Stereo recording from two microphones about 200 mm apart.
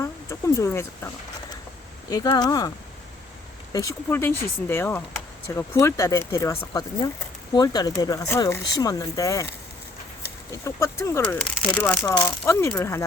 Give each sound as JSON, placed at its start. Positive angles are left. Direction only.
{"t": 0.0, "sound": "speech", "side_deg": 15}
{"t": 10.6, "sound": "speech", "side_deg": 15}